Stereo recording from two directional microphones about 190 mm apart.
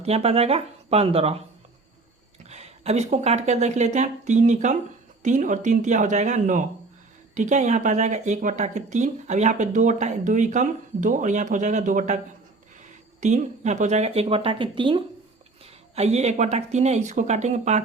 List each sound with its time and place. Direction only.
0.0 s speech: 35° right (ahead or behind)
2.4 s speech: 35° right (ahead or behind)